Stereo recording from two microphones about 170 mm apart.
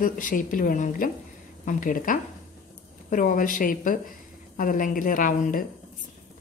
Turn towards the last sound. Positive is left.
turn(degrees=50)  # may be behind; listen again after turning